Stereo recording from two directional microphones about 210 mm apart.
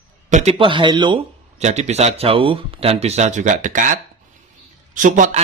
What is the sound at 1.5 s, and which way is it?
Speech, 30° right (ahead or behind).